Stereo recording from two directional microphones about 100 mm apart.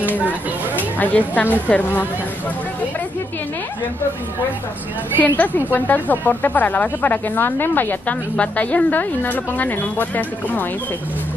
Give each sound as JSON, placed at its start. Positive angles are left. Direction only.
{"t": 0.7, "sound": "a woman's voice", "side_deg": 15}
{"t": 5.2, "sound": "a woman's voice", "side_deg": 15}